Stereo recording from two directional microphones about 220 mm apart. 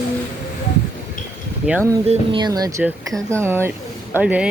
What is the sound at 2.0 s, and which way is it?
Speech, 20° right (ahead or behind).